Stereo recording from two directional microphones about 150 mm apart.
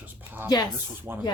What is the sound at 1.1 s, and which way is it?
Speech, 15° right (ahead or behind).